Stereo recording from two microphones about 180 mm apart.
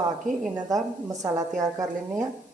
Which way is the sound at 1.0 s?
20° right (ahead or behind).